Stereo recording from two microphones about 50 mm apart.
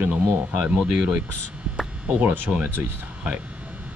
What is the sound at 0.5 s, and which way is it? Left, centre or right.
Speech, right.